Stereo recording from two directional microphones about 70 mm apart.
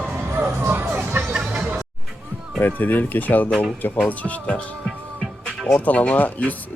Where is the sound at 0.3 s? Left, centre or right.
Right.